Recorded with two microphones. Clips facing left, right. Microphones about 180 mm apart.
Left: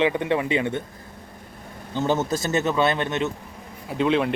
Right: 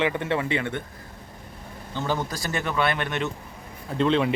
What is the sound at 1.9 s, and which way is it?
A man's voice, 20° left (ahead or behind).